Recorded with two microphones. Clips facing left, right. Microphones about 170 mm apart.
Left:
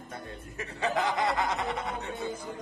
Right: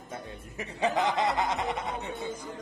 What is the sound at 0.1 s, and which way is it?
Speech, 20° right (ahead or behind).